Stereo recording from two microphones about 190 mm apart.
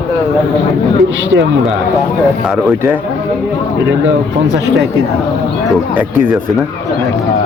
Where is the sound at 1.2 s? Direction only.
80° right.